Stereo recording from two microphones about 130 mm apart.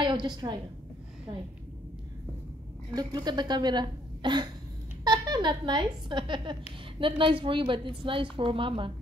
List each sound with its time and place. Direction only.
0.0 s a woman's voice: 35° right (ahead or behind)
2.9 s a woman's voice: 30° right (ahead or behind)